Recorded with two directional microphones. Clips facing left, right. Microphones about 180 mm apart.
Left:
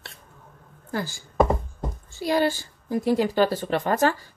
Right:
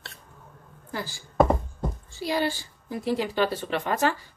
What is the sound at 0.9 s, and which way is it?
A woman's voice, 45° left (ahead or behind).